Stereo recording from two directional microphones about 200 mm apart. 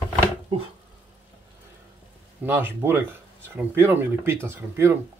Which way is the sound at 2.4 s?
10° right (ahead or behind).